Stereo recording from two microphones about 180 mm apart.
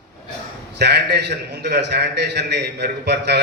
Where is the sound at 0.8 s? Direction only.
65° right (ahead or behind).